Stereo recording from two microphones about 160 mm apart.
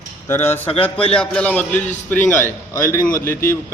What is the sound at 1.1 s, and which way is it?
A man's voice, 10° left (ahead or behind).